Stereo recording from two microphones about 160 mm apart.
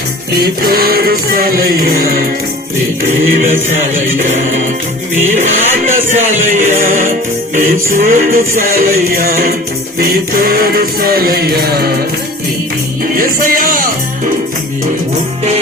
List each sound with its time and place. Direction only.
0.3 s music: 70° right (ahead or behind)
13.1 s music: 60° right (ahead or behind)